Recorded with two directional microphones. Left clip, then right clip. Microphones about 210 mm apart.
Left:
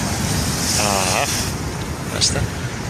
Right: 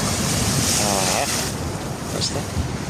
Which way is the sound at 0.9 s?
Centre (ahead or behind).